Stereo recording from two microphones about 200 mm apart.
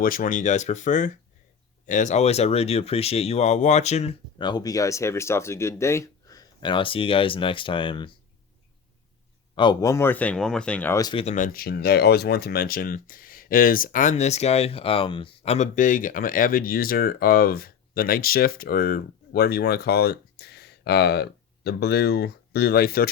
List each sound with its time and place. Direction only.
0.0 s speech: 45° left (ahead or behind); by 8.1 s 25° left (ahead or behind)
9.6 s speech: 20° left (ahead or behind)
11.1 s speech: 30° left (ahead or behind)
11.3 s speech: 45° left (ahead or behind)